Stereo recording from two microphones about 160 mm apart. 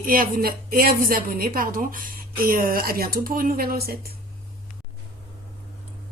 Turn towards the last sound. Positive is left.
turn(degrees=-70)  # may be behind; listen again after turning